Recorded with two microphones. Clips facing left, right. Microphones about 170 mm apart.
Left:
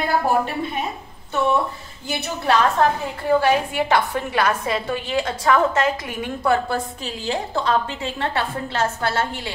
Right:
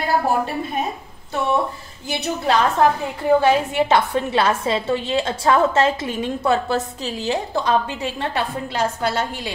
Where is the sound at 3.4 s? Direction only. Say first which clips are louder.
Right 2 dB; 20° right (ahead or behind).